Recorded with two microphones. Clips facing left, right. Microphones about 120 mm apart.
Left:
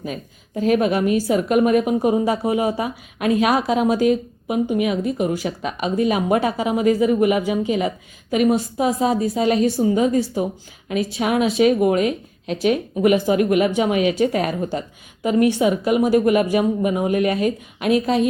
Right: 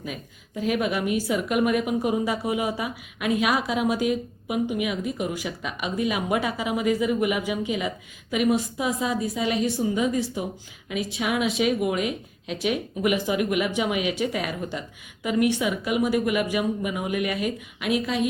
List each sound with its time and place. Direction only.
0.0 s a woman's voice: 40° left (ahead or behind)